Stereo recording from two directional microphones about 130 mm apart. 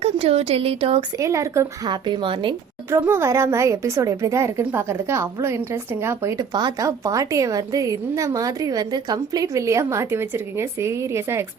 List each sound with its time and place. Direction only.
0.0 s speech: 50° right (ahead or behind)
1.2 s a woman's voice: 25° right (ahead or behind); by 2.6 s 40° right (ahead or behind)
2.9 s a woman's voice: 20° right (ahead or behind)
6.5 s a woman's voice: 35° right (ahead or behind)